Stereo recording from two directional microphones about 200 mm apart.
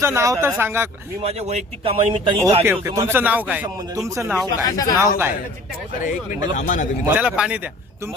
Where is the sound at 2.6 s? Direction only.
10° right (ahead or behind).